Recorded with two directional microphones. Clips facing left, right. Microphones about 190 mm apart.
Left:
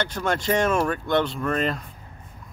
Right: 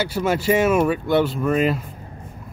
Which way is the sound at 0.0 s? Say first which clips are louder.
Right 4 dB; 5° right (ahead or behind).